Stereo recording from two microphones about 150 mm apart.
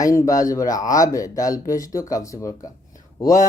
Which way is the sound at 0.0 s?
20° left (ahead or behind).